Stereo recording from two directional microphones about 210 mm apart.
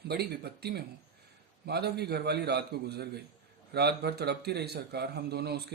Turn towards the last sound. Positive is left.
turn(degrees=-50)  # may be behind; listen again after turning